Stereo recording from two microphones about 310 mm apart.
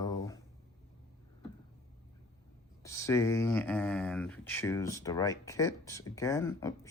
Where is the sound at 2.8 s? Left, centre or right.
Centre.